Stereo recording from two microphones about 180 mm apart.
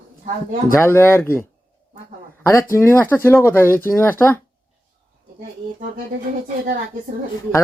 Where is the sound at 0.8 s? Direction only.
15° left (ahead or behind).